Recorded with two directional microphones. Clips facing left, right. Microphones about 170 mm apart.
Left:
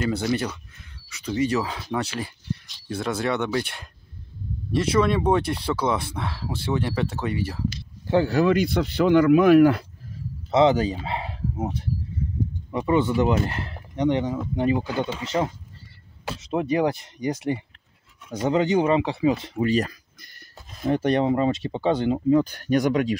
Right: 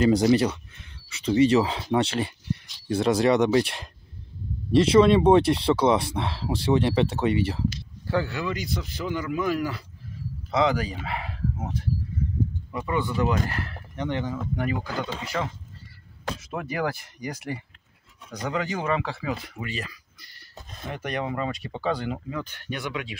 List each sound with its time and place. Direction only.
0.0 s speech: 30° right (ahead or behind)
8.1 s speech: 20° left (ahead or behind)
8.5 s speech: 60° left (ahead or behind)
10.5 s speech: 25° left (ahead or behind)
19.7 s a sound: 45° left (ahead or behind)
20.8 s speech: 30° left (ahead or behind)
22.4 s speech: 40° left (ahead or behind)